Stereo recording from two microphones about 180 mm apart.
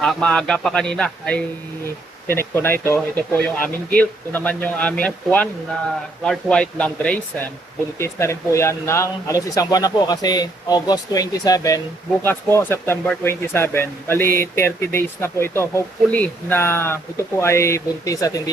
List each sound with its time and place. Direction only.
0.0 s a man's voice: 5° left (ahead or behind)